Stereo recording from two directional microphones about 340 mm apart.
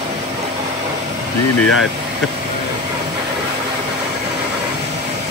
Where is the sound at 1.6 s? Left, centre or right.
Left.